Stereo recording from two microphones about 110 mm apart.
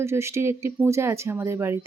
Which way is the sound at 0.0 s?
25° right (ahead or behind).